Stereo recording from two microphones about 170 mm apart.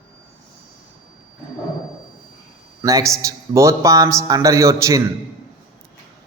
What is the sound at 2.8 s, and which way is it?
A man's voice, 20° right (ahead or behind).